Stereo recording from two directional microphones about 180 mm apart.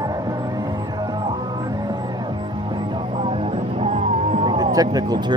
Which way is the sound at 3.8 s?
35° right (ahead or behind).